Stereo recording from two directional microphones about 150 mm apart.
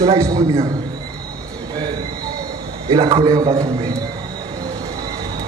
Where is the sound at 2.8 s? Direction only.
35° right (ahead or behind).